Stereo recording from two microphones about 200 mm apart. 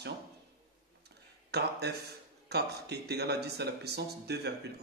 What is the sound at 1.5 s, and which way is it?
Speech, 55° right (ahead or behind).